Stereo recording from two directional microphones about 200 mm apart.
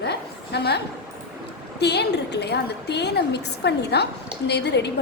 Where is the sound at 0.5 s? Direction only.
55° left (ahead or behind).